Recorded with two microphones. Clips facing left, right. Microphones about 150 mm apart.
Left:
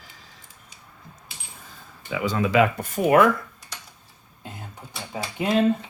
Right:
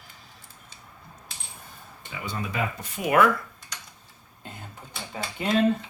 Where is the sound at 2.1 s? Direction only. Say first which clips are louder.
Left 11 dB; 90° left.